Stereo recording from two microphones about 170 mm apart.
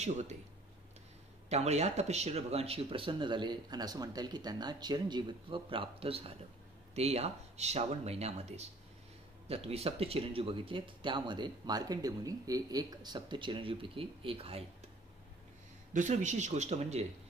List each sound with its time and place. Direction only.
1.5 s speech: 40° right (ahead or behind)
15.9 s speech: 45° right (ahead or behind)